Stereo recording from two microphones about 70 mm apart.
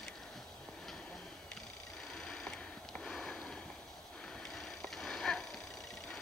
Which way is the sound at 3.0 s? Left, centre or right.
Centre.